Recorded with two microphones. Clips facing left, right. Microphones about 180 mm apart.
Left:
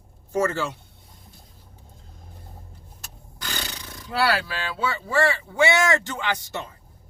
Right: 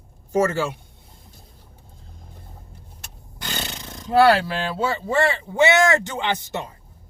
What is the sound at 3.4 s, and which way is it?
Roar, 20° right (ahead or behind).